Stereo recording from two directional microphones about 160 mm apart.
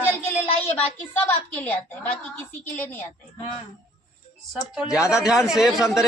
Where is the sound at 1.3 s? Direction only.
10° left (ahead or behind).